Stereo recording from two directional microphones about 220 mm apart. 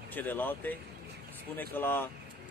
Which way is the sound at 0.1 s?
10° left (ahead or behind).